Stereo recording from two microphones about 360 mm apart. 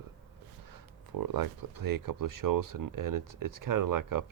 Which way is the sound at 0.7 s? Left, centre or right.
Right.